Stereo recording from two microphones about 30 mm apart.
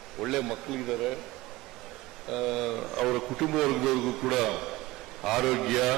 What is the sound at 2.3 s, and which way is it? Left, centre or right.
A man's voice, centre.